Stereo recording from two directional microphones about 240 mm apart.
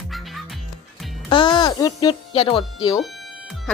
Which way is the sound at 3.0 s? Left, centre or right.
Centre.